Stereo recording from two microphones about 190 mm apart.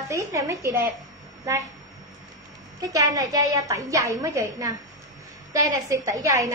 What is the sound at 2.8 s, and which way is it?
A woman's voice, 15° right (ahead or behind).